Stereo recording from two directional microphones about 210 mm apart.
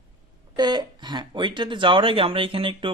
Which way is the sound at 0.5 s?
20° right (ahead or behind).